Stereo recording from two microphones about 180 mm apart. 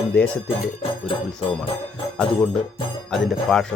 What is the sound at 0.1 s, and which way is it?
Speech, 5° left (ahead or behind).